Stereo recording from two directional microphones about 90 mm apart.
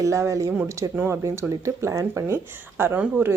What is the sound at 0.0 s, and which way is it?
A woman's voice, 35° right (ahead or behind).